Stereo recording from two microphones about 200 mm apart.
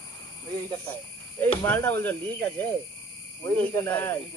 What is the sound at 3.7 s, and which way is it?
Speech, 10° left (ahead or behind).